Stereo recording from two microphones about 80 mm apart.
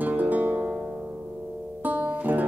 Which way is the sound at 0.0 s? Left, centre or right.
Right.